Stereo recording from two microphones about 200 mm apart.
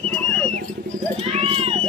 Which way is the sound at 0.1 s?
5° left (ahead or behind).